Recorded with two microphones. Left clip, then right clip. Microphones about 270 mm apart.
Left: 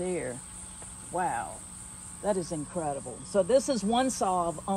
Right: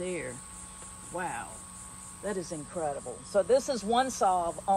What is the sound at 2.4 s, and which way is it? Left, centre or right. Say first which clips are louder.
Speech: left 1 dB; left.